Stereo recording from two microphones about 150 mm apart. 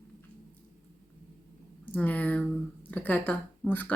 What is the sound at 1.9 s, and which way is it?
Speech, 10° left (ahead or behind).